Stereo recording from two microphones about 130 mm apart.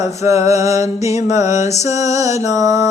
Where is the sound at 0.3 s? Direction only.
25° right (ahead or behind).